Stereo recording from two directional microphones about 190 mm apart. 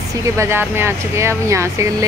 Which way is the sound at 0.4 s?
10° right (ahead or behind).